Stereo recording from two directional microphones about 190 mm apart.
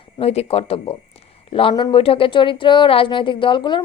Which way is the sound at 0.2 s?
30° left (ahead or behind).